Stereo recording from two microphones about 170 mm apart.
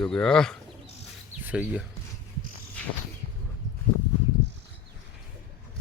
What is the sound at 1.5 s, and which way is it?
Speech, 10° right (ahead or behind).